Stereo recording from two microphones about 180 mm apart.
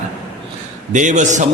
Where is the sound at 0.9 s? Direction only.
45° right (ahead or behind).